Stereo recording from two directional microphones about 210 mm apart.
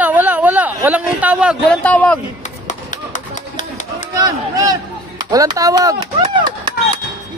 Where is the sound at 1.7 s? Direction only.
5° left (ahead or behind).